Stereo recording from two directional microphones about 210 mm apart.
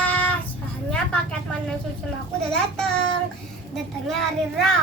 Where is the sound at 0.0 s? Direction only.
5° left (ahead or behind).